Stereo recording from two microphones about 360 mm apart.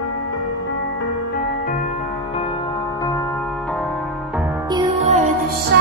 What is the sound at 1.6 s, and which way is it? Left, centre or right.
Music, left.